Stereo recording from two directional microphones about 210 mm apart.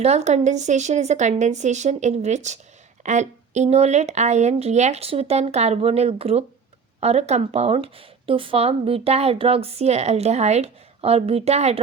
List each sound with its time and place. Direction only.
0.0 s speech: 30° right (ahead or behind)